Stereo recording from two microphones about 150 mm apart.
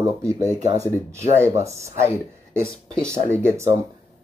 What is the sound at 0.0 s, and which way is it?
Speech, 20° right (ahead or behind).